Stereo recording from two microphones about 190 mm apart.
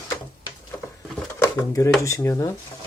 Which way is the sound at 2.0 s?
15° left (ahead or behind).